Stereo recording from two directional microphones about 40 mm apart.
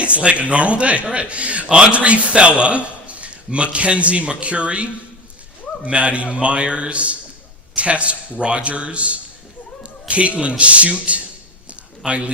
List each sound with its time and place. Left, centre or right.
0.0 s a man's voice: right